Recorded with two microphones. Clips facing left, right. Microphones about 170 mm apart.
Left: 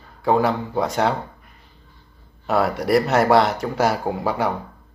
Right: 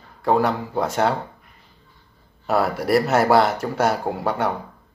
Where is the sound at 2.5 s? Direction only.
Centre (ahead or behind).